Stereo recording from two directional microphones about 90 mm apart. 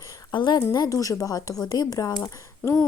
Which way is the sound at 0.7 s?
40° left (ahead or behind).